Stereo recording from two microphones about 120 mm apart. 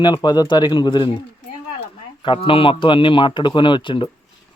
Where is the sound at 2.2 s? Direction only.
45° left (ahead or behind).